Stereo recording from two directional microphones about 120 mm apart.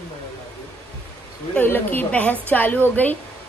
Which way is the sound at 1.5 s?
15° left (ahead or behind).